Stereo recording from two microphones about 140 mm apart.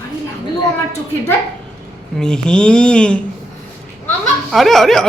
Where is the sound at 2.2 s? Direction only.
5° left (ahead or behind).